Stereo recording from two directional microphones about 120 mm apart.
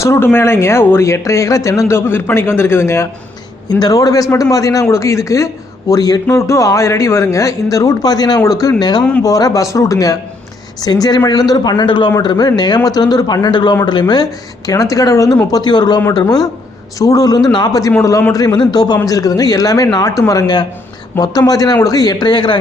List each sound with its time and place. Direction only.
0.0 s a man's voice: 20° left (ahead or behind)
3.7 s a man's voice: 35° left (ahead or behind)